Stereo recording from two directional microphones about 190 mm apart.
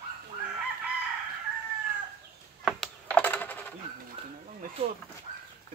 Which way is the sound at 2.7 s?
5° left (ahead or behind).